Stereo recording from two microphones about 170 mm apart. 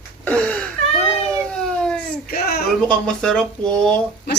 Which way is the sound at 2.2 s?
60° left (ahead or behind).